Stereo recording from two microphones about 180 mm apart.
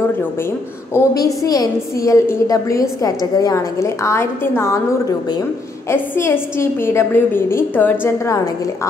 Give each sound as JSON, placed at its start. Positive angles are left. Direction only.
{"t": 0.9, "sound": "a woman's voice", "side_deg": 20}
{"t": 5.9, "sound": "a woman's voice", "side_deg": 15}